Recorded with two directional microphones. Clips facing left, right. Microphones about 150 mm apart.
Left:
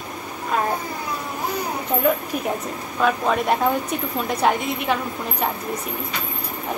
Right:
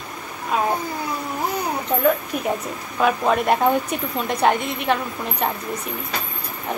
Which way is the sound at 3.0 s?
5° right (ahead or behind).